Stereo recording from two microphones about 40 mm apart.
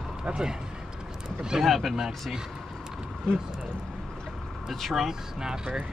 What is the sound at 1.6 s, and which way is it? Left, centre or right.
Speech, centre.